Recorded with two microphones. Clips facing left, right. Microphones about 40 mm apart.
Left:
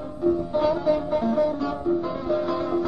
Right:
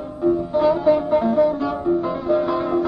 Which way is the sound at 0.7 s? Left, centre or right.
Right.